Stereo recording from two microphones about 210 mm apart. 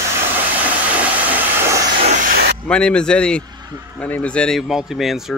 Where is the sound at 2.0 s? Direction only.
35° right (ahead or behind).